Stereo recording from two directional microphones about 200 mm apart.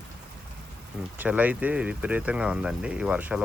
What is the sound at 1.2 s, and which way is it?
Speech, 5° right (ahead or behind).